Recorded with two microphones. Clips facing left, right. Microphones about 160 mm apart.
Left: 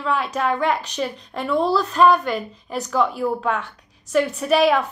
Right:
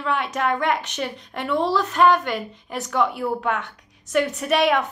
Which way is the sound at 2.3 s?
35° left (ahead or behind).